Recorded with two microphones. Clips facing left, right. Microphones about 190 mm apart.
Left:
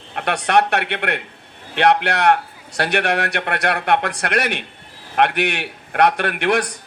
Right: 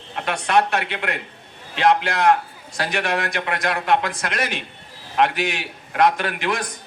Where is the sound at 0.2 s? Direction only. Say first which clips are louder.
Left 2 dB; 65° left (ahead or behind).